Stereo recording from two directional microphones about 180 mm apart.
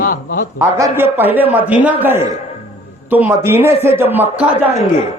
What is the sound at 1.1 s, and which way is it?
A man's voice, 10° right (ahead or behind).